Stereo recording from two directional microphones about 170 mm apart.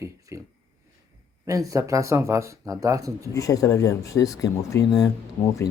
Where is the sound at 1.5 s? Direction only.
20° right (ahead or behind).